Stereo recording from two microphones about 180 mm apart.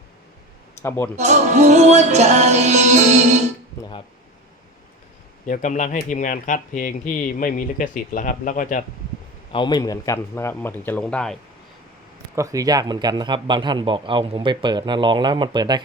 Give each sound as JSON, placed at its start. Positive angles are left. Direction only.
{"t": 0.8, "sound": "a man's voice", "side_deg": 15}
{"t": 1.1, "sound": "music", "side_deg": -40}
{"t": 5.5, "sound": "speech", "side_deg": 45}
{"t": 9.5, "sound": "a man's voice", "side_deg": 25}
{"t": 12.4, "sound": "speech", "side_deg": -20}